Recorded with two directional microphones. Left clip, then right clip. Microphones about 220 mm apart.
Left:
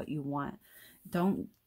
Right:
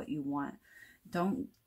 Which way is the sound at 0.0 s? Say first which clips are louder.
Left 1 dB; 45° left (ahead or behind).